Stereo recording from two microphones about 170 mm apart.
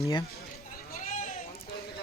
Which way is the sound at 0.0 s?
25° left (ahead or behind).